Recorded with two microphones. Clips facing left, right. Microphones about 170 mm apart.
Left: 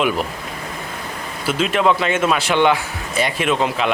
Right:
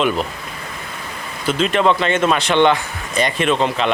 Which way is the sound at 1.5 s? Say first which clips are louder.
Right 1 dB; 5° left (ahead or behind).